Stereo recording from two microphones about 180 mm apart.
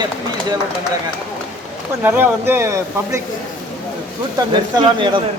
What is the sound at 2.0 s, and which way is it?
Speech, 10° right (ahead or behind).